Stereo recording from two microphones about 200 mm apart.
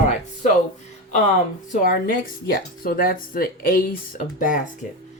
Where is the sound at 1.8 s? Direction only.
45° left (ahead or behind).